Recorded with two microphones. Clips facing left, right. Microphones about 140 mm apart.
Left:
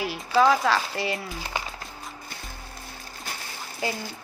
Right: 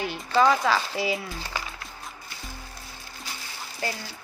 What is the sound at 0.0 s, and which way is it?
Speech, centre (ahead or behind).